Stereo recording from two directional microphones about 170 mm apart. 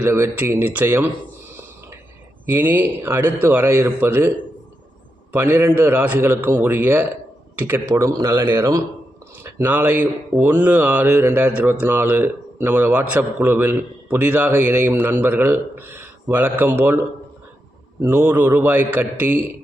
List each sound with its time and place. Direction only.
0.0 s speech: 15° right (ahead or behind)
2.5 s speech: 10° right (ahead or behind)
5.3 s speech: 15° right (ahead or behind)
18.0 s speech: 10° right (ahead or behind)